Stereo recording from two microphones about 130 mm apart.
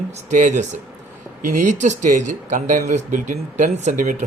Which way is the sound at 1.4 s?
80° right.